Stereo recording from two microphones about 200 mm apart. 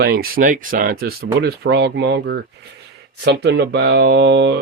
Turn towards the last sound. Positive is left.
turn(degrees=-60)  # may be behind; listen again after turning